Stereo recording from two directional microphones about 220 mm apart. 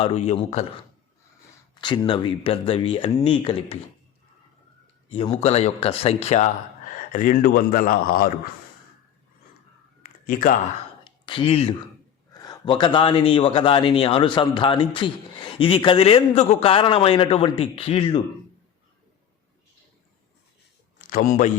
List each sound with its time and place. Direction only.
0.0 s speech: 30° left (ahead or behind)
1.7 s speech: 20° left (ahead or behind)
5.0 s speech: 25° left (ahead or behind); by 8.4 s 40° left (ahead or behind)
10.0 s a sound: 40° left (ahead or behind)
11.0 s a sound: 20° left (ahead or behind)
12.3 s speech: 15° left (ahead or behind)
21.0 s speech: 40° left (ahead or behind)